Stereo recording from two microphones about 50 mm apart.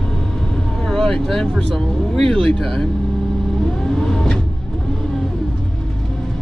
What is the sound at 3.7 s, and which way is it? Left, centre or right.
Vehicle, centre.